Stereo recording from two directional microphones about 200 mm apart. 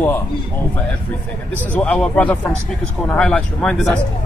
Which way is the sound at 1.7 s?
5° left (ahead or behind).